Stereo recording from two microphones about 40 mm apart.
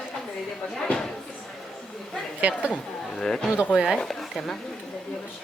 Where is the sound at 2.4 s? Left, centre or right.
Right.